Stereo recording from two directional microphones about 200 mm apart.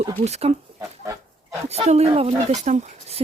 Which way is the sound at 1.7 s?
30° right (ahead or behind).